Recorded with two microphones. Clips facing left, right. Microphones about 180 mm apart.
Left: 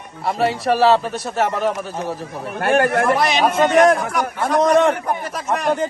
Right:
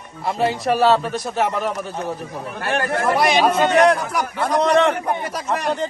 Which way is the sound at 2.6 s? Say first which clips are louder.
Left 5 dB; 60° left (ahead or behind).